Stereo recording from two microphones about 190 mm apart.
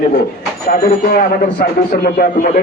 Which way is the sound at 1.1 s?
50° left (ahead or behind).